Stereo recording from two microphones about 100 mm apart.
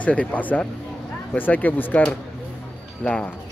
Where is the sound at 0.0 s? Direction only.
15° left (ahead or behind).